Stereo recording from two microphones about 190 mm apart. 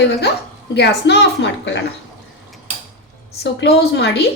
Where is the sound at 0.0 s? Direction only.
60° left (ahead or behind).